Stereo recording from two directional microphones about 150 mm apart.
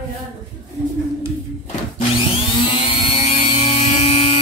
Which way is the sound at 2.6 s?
35° left (ahead or behind).